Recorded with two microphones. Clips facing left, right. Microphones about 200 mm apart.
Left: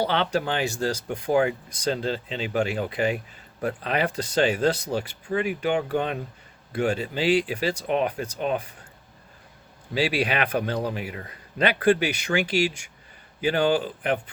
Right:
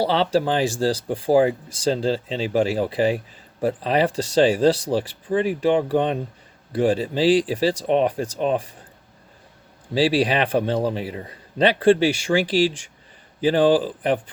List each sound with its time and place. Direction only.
0.0 s a man's voice: 35° right (ahead or behind)
9.9 s a man's voice: 35° right (ahead or behind)